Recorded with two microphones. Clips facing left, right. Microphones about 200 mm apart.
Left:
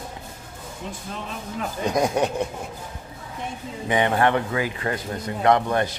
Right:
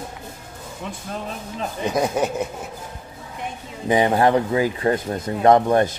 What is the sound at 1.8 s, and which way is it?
Speech, 5° right (ahead or behind).